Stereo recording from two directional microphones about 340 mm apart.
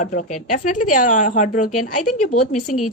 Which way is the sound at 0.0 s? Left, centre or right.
Left.